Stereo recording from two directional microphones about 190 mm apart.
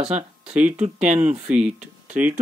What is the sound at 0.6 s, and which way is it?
Speech, 40° right (ahead or behind).